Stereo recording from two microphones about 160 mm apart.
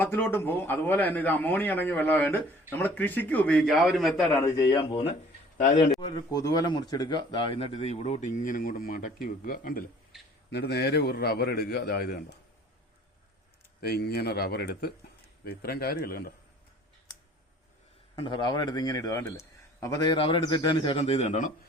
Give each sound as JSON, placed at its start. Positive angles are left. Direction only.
{"t": 0.0, "sound": "a man's voice", "side_deg": 15}
{"t": 4.3, "sound": "a man's voice", "side_deg": 20}
{"t": 4.7, "sound": "a man's voice", "side_deg": 30}
{"t": 10.5, "sound": "a man's voice", "side_deg": 90}
{"t": 13.8, "sound": "a man's voice", "side_deg": 75}
{"t": 15.4, "sound": "a man's voice", "side_deg": 75}
{"t": 18.2, "sound": "a man's voice", "side_deg": 30}